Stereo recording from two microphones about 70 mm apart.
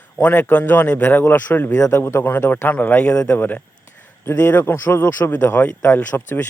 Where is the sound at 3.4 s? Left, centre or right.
Left.